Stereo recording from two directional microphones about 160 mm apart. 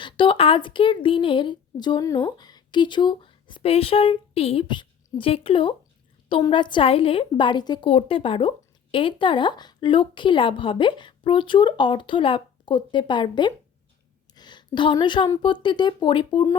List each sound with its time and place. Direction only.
0.0 s speech: 30° left (ahead or behind)
7.9 s speech: 35° left (ahead or behind)
14.3 s a sound: 30° left (ahead or behind)
15.6 s speech: 30° left (ahead or behind)